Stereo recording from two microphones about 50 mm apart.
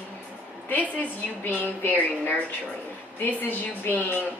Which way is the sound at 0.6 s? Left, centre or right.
Left.